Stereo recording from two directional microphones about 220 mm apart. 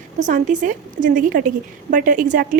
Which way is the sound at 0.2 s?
35° right (ahead or behind).